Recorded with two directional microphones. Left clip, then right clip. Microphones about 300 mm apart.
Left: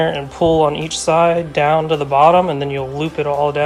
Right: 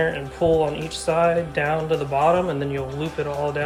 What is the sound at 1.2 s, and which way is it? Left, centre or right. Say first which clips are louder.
Speech: left 6 dB; centre.